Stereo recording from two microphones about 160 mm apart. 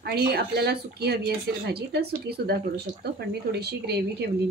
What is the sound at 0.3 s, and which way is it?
Speech, 85° right.